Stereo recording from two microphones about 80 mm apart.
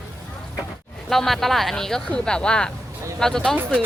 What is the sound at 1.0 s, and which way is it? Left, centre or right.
A woman's voice, centre.